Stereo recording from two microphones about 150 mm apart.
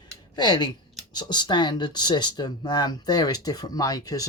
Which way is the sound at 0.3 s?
30° left (ahead or behind).